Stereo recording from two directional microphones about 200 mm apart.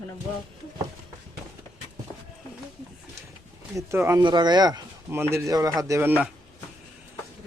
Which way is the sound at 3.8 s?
15° right (ahead or behind).